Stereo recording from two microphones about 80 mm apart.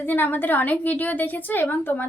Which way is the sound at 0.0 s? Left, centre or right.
Left.